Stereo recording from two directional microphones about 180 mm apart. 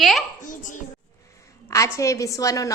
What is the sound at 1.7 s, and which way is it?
A woman's voice, 15° left (ahead or behind).